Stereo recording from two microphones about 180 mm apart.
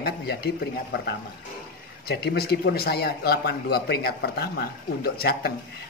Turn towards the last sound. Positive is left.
turn(degrees=60)  # may be behind; listen again after turning